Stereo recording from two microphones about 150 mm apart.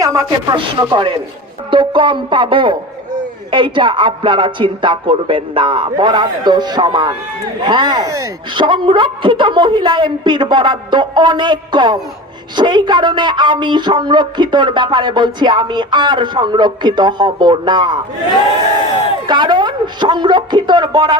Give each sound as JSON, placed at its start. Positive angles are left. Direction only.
{"t": 0.0, "sound": "speech", "side_deg": -25}
{"t": 8.6, "sound": "speech", "side_deg": -35}
{"t": 19.3, "sound": "speech", "side_deg": -30}